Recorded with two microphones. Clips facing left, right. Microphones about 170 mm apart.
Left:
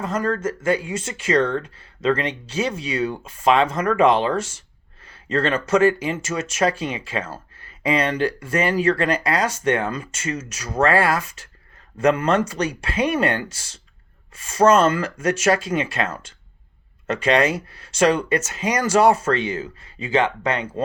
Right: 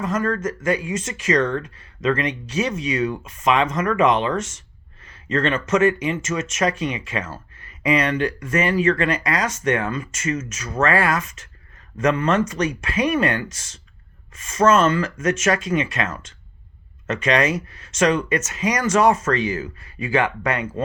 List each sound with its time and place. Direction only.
0.0 s speech: 30° left (ahead or behind)